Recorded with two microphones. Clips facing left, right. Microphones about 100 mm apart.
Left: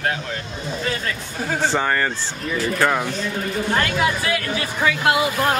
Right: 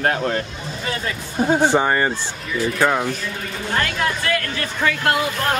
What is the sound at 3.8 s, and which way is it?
Speech, 5° left (ahead or behind).